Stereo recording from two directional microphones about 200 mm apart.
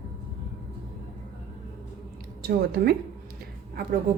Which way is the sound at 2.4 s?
50° right (ahead or behind).